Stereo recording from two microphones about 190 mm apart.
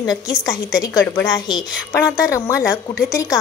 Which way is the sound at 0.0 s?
20° left (ahead or behind).